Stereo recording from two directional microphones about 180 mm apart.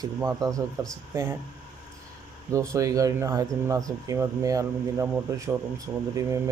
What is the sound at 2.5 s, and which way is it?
Speech, 15° right (ahead or behind).